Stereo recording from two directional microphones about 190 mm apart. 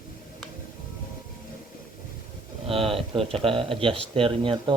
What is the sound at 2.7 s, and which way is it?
Speech, 30° right (ahead or behind).